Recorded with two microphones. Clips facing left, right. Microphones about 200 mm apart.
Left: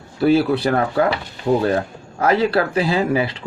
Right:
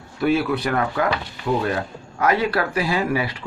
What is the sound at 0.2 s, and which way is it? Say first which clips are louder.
Speech: left 5 dB; 30° left (ahead or behind).